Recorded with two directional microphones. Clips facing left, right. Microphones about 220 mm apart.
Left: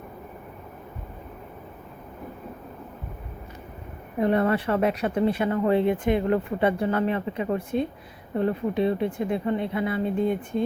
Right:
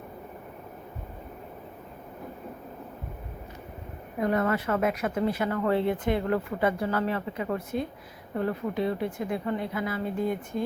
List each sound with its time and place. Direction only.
4.2 s speech: 25° left (ahead or behind)